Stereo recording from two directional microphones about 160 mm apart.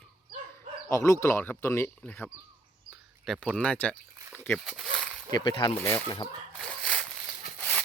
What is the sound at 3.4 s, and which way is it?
Speech, 5° left (ahead or behind).